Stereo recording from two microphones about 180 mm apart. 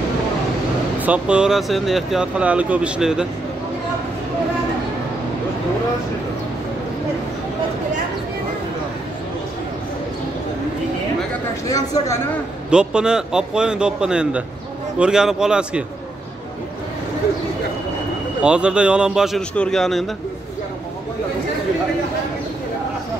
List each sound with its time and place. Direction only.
1.0 s speech: 5° right (ahead or behind)
11.7 s a woman's voice: 20° left (ahead or behind)
12.6 s speech: 5° right (ahead or behind)
18.4 s speech: 5° right (ahead or behind)